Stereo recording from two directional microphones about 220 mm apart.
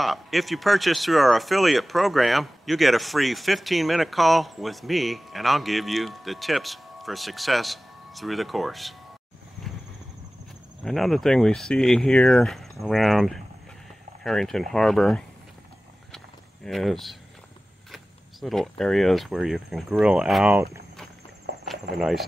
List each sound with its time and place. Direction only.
0.0 s speech: centre (ahead or behind)
10.8 s speech: centre (ahead or behind)
16.6 s speech: centre (ahead or behind)
21.5 s a sound: 50° right (ahead or behind)
21.9 s speech: centre (ahead or behind)